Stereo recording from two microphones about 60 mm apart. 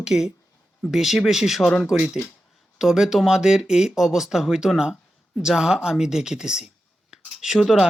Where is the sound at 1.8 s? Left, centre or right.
Centre.